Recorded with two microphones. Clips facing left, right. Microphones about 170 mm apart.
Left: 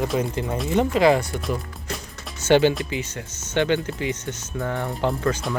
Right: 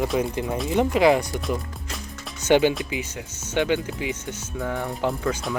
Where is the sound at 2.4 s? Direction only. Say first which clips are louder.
Left 1 dB; 15° right (ahead or behind).